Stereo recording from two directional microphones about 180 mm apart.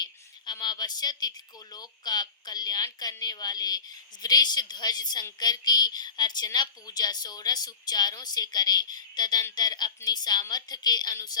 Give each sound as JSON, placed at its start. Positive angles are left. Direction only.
{"t": 0.0, "sound": "speech", "side_deg": 25}